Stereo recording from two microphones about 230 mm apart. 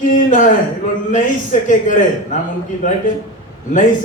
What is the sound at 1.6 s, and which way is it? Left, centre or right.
Speech, left.